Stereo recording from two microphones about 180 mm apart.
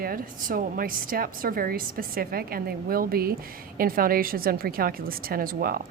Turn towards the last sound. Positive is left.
turn(degrees=-55)  # may be behind; listen again after turning